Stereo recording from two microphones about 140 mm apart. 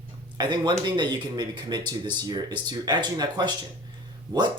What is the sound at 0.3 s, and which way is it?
Speech, 30° right (ahead or behind).